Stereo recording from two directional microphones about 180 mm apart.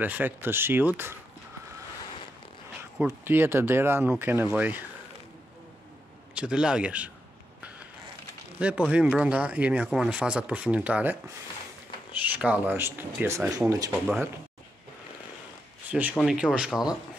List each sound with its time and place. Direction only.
0.0 s speech: 10° right (ahead or behind)
2.8 s speech: 10° right (ahead or behind)
6.3 s speech: 5° right (ahead or behind)
8.5 s speech: 5° right (ahead or behind)
15.9 s speech: 10° right (ahead or behind)